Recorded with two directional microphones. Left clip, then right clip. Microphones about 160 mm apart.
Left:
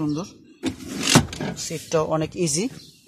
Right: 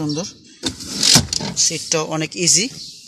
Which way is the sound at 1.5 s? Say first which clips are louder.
Right 4 dB; centre (ahead or behind).